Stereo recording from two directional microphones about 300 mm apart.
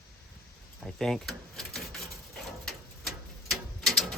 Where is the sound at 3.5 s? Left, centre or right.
Centre.